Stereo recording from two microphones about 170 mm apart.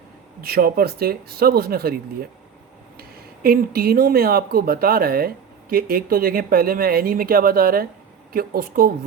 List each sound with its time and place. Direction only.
0.4 s speech: 65° right (ahead or behind)
3.0 s speech: 60° right (ahead or behind)